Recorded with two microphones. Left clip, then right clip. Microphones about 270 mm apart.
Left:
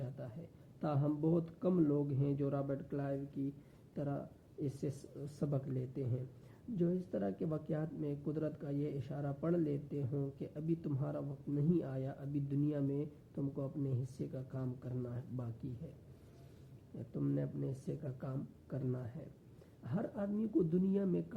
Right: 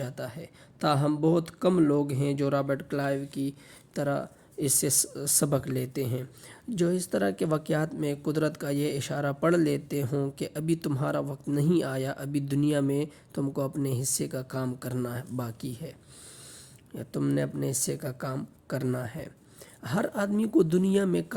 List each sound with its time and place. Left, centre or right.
0.0 s a sound: right
0.8 s speech: right
17.1 s speech: right